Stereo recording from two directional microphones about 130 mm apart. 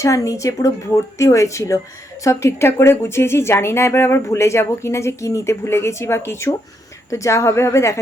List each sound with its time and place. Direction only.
0.0 s speech: 25° left (ahead or behind)